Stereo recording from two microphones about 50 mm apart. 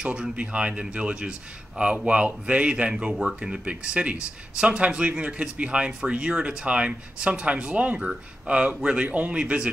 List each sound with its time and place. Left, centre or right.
0.0 s speech: right